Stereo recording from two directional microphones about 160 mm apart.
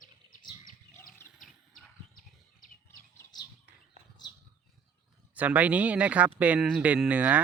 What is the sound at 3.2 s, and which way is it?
Bird, 25° left (ahead or behind).